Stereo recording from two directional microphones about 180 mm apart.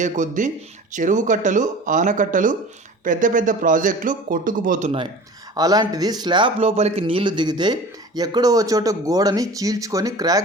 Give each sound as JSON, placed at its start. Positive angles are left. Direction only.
{"t": 0.0, "sound": "speech", "side_deg": -45}
{"t": 5.5, "sound": "speech", "side_deg": -20}